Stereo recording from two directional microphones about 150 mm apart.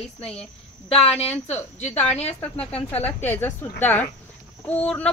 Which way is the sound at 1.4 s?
45° left (ahead or behind).